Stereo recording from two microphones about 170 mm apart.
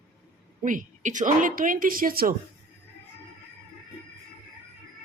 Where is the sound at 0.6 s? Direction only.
50° right (ahead or behind).